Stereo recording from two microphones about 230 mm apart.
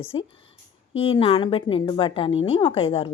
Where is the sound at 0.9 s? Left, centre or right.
Left.